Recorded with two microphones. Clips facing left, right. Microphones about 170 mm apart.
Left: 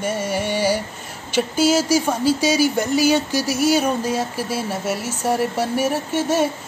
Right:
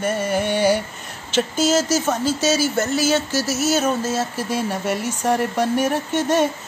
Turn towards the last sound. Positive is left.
turn(degrees=10)  # may be behind; listen again after turning